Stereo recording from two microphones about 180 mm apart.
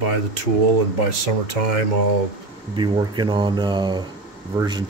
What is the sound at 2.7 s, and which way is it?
Speech, 25° right (ahead or behind).